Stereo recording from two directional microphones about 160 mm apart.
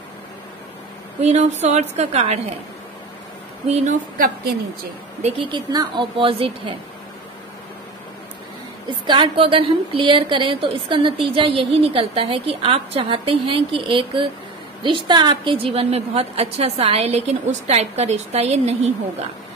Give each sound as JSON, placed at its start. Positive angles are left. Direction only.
{"t": 1.2, "sound": "a woman's voice", "side_deg": -45}
{"t": 3.6, "sound": "a woman's voice", "side_deg": -40}
{"t": 5.5, "sound": "a woman's voice", "side_deg": -25}
{"t": 9.0, "sound": "a woman's voice", "side_deg": -30}